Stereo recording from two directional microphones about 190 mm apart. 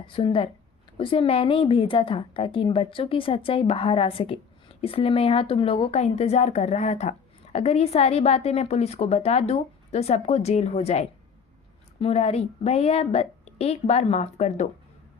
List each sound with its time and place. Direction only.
0.0 s a woman's voice: 25° left (ahead or behind)